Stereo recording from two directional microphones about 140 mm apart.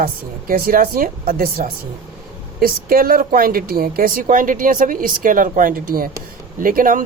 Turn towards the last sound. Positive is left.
turn(degrees=-80)